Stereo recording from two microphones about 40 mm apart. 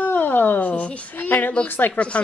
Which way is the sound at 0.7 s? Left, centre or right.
Left.